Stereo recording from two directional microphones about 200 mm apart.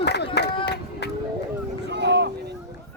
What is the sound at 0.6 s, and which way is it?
Run, 55° left (ahead or behind).